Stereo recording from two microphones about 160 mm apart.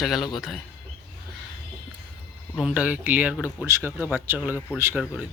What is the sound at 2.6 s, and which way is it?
Speech, 5° right (ahead or behind).